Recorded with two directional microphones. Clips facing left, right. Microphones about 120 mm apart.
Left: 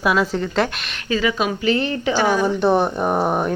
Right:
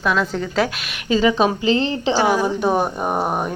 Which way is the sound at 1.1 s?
30° right (ahead or behind).